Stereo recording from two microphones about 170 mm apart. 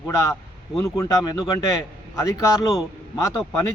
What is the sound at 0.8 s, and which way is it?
Speech, 20° left (ahead or behind).